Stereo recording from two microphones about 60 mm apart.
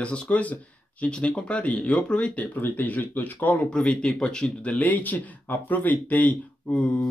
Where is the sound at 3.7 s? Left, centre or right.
Centre.